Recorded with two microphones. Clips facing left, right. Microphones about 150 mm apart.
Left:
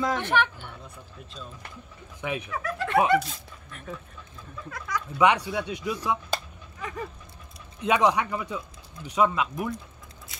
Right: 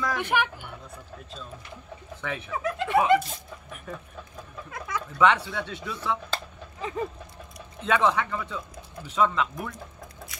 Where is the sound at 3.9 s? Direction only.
Centre (ahead or behind).